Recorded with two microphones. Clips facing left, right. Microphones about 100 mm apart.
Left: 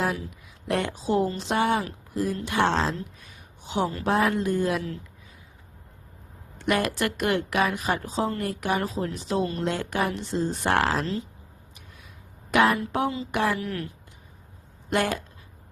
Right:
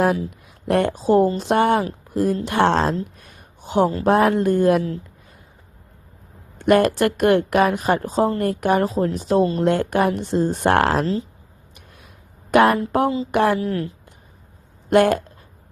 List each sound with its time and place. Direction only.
0.3 s a woman's voice: 50° right (ahead or behind)
3.2 s a sound: 50° right (ahead or behind)
4.0 s a woman's voice: 55° right (ahead or behind)
6.6 s a woman's voice: 50° right (ahead or behind)
11.0 s speech: 35° right (ahead or behind)
12.5 s a woman's voice: 50° right (ahead or behind)
13.6 s a woman's voice: 30° right (ahead or behind)
14.8 s speech: 55° right (ahead or behind)